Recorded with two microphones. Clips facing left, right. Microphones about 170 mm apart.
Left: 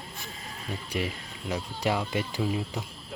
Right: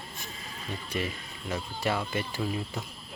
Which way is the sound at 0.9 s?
15° left (ahead or behind).